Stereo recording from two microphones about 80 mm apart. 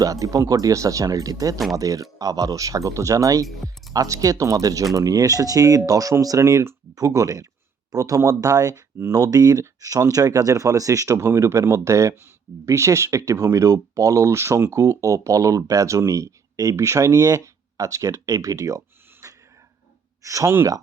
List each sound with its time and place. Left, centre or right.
0.0 s speech: right
3.4 s speech: centre
3.9 s speech: right
9.0 s speech: right
19.2 s a sound: right
20.2 s speech: right